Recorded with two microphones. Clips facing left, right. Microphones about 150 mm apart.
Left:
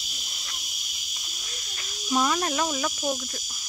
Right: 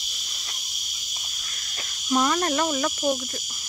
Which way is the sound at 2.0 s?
5° left (ahead or behind).